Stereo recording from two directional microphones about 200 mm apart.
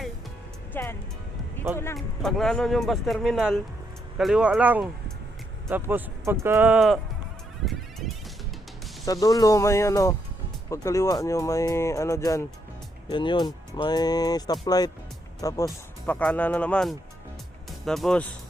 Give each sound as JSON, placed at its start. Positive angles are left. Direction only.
{"t": 0.7, "sound": "speech", "side_deg": 10}
{"t": 2.0, "sound": "speech", "side_deg": 0}
{"t": 7.6, "sound": "a sound", "side_deg": 0}
{"t": 9.2, "sound": "speech", "side_deg": 15}